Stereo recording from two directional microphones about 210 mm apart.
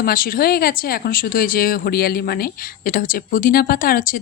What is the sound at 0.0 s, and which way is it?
Speech, 45° left (ahead or behind).